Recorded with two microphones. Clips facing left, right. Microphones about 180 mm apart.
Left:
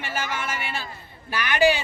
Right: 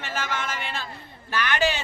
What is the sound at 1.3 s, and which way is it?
Speech, 10° left (ahead or behind).